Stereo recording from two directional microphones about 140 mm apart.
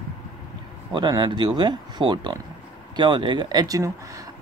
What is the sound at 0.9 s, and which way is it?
Speech, 30° right (ahead or behind).